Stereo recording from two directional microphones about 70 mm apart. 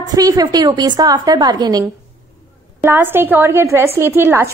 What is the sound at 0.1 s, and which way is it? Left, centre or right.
A woman's voice, right.